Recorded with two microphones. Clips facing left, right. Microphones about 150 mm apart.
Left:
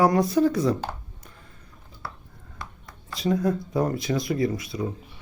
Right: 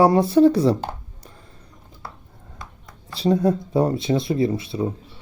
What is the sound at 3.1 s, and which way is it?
Speech, 30° right (ahead or behind).